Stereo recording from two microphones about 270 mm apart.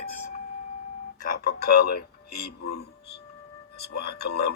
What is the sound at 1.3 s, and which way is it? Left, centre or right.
Speech, left.